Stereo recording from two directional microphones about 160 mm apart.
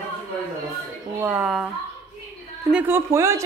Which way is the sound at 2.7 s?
15° right (ahead or behind).